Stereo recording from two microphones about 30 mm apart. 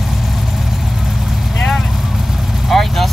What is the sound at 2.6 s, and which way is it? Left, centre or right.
Speech, centre.